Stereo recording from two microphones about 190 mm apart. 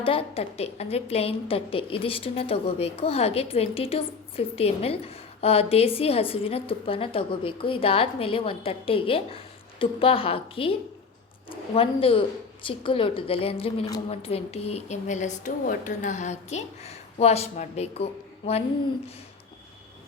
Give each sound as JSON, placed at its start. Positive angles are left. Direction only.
{"t": 0.0, "sound": "a woman's voice", "side_deg": 30}